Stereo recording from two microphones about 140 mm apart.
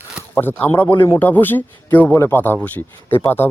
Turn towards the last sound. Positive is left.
turn(degrees=15)  # may be behind; listen again after turning